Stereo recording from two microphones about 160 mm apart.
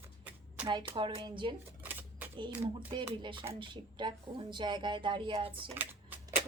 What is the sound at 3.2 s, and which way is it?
A woman's voice, 30° right (ahead or behind).